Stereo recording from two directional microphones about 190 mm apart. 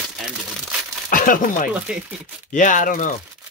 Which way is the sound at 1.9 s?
5° right (ahead or behind).